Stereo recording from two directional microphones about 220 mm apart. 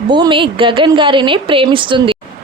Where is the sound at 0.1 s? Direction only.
20° right (ahead or behind).